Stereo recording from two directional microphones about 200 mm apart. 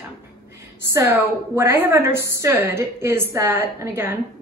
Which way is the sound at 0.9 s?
10° right (ahead or behind).